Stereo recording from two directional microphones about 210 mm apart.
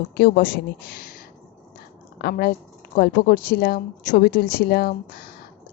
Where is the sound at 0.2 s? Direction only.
45° left (ahead or behind).